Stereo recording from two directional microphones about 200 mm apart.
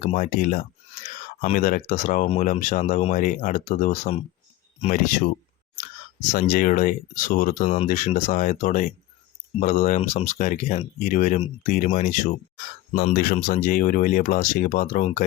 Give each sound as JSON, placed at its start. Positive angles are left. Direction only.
{"t": 0.0, "sound": "speech", "side_deg": 40}
{"t": 6.4, "sound": "speech", "side_deg": 40}